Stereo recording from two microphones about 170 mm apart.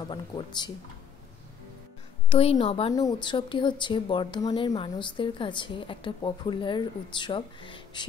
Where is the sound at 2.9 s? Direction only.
25° left (ahead or behind).